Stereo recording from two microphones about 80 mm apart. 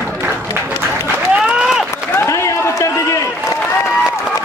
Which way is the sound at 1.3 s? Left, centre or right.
Centre.